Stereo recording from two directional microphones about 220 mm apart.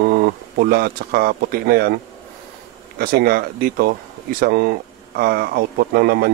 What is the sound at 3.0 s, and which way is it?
Speech, 40° right (ahead or behind).